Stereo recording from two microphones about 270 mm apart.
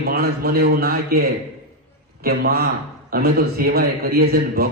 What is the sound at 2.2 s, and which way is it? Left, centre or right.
A man's voice, right.